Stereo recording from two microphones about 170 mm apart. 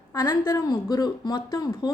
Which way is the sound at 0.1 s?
15° left (ahead or behind).